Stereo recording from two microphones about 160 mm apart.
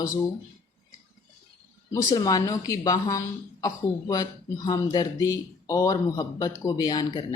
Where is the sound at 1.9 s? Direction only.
25° left (ahead or behind).